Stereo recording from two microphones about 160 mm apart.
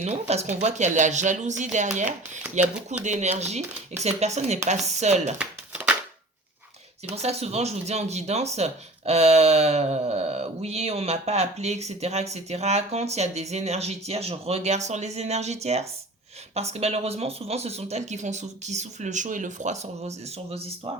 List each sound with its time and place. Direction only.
0.0 s speech: 40° right (ahead or behind)
5.4 s a sound: 10° right (ahead or behind)
7.2 s speech: 40° right (ahead or behind)